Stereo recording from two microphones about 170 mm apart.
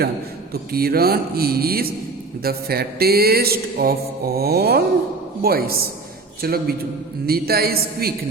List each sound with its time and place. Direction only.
0.5 s speech: 65° right (ahead or behind)